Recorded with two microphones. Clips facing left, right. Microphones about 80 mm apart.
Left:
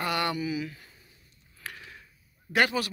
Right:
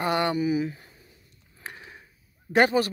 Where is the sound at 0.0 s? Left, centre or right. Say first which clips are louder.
Right 5 dB; right.